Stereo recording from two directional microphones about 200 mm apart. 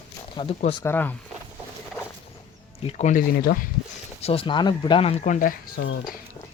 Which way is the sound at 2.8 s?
35° left (ahead or behind).